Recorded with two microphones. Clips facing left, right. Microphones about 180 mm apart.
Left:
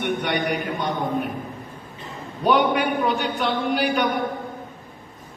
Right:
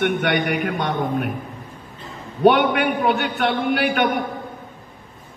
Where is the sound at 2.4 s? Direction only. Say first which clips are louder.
Right 4 dB; 60° right (ahead or behind).